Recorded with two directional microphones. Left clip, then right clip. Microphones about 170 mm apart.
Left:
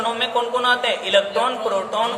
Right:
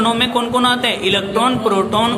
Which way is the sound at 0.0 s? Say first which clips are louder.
Right 5 dB; 25° right (ahead or behind).